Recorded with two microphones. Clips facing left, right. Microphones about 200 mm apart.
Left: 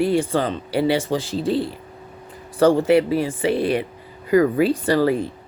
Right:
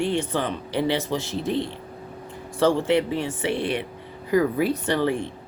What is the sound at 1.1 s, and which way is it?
Speech, 30° left (ahead or behind).